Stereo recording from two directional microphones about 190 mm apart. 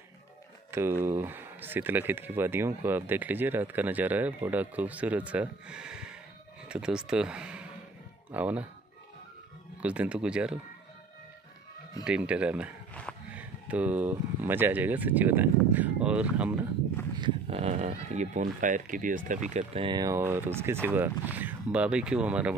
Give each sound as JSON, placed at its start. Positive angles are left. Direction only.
{"t": 0.7, "sound": "speech", "side_deg": -10}
{"t": 9.8, "sound": "speech", "side_deg": -5}
{"t": 12.0, "sound": "speech", "side_deg": -5}
{"t": 17.2, "sound": "speech", "side_deg": -30}